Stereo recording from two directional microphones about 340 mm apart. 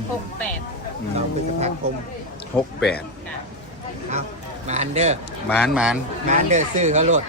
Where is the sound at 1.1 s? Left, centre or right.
Centre.